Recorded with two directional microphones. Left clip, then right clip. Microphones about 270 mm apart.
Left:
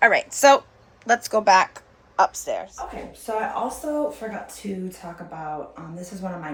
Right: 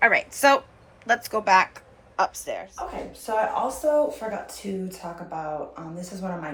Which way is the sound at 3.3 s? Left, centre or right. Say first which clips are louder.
Right 1 dB; centre.